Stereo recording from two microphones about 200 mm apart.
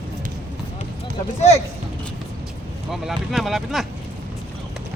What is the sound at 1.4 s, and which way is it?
Speech, 30° left (ahead or behind).